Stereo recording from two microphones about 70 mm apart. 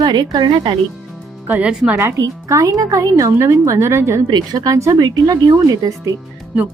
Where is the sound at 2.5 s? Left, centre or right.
Right.